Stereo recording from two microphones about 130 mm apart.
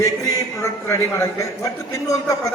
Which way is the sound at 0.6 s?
25° left (ahead or behind).